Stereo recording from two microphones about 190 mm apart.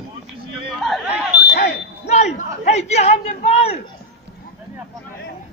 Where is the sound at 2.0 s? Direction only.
35° left (ahead or behind).